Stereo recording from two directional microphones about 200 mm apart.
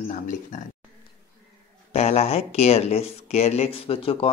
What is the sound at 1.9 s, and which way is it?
Speech, 30° left (ahead or behind).